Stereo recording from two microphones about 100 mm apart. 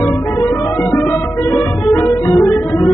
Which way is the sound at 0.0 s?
20° left (ahead or behind).